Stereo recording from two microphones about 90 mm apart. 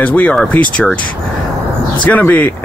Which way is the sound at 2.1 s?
20° left (ahead or behind).